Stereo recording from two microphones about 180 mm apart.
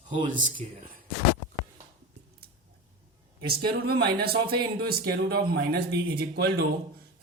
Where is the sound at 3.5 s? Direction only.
60° right (ahead or behind).